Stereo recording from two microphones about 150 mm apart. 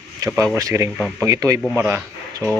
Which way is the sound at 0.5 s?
20° right (ahead or behind).